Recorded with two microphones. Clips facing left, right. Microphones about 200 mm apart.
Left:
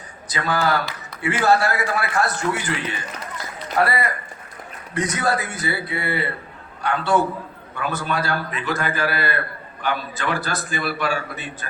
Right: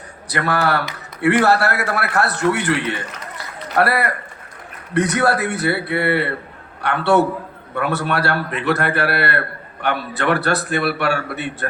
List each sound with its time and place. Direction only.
0.3 s a man's voice: 65° right (ahead or behind)